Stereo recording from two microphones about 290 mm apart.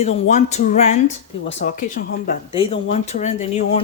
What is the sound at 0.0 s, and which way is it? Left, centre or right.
Speech, left.